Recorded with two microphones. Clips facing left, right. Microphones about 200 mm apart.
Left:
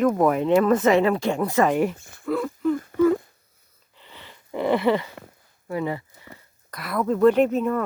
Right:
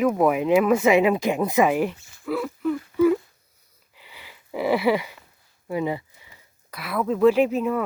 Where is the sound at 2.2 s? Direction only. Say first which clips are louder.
Left 2 dB; 5° right (ahead or behind).